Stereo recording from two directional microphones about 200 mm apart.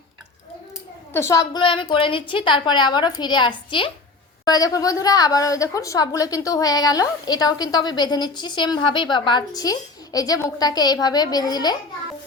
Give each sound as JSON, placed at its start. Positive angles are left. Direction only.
{"t": 1.1, "sound": "a woman's voice", "side_deg": 15}